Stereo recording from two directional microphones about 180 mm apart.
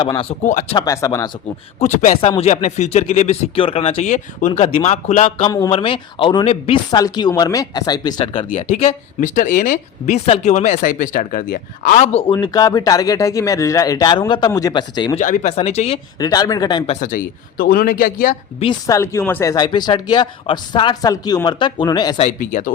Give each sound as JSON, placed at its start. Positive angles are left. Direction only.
{"t": 0.0, "sound": "speech", "side_deg": 30}
{"t": 0.4, "sound": "speech", "side_deg": 40}
{"t": 0.8, "sound": "speech", "side_deg": 20}
{"t": 1.8, "sound": "speech", "side_deg": 40}
{"t": 5.5, "sound": "speech", "side_deg": 20}
{"t": 12.3, "sound": "speech", "side_deg": 20}
{"t": 15.1, "sound": "speech", "side_deg": 45}
{"t": 16.1, "sound": "speech", "side_deg": 20}
{"t": 16.9, "sound": "speech", "side_deg": 45}
{"t": 18.6, "sound": "speech", "side_deg": 20}
{"t": 22.2, "sound": "speech", "side_deg": 45}